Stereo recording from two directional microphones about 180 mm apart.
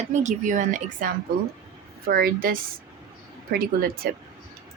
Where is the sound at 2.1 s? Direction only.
55° right (ahead or behind).